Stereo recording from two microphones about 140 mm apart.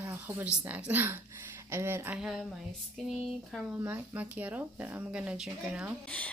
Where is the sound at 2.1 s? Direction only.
Centre (ahead or behind).